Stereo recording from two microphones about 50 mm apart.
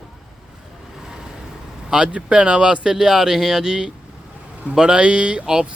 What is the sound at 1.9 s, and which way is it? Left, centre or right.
Speech, centre.